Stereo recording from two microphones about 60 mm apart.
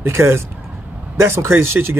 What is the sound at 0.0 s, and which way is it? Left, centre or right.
Speech, right.